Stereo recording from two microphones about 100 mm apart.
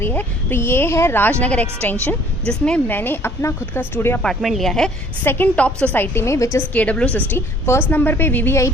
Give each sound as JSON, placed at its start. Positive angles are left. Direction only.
{"t": 0.0, "sound": "speech", "side_deg": 20}
{"t": 4.4, "sound": "speech", "side_deg": 0}
{"t": 5.2, "sound": "speech", "side_deg": 20}
{"t": 6.7, "sound": "a woman's voice", "side_deg": 10}
{"t": 7.3, "sound": "speech", "side_deg": 25}